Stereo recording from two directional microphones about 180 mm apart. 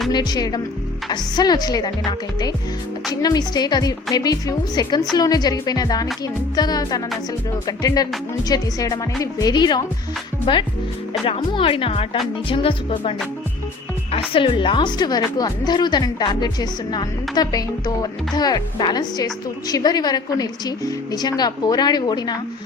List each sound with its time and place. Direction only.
0.1 s a woman's voice: 25° left (ahead or behind)